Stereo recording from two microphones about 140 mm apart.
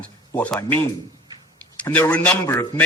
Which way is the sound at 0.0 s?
10° left (ahead or behind).